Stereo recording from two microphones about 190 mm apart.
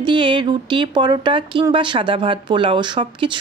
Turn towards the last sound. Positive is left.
turn(degrees=-25)  # may be behind; listen again after turning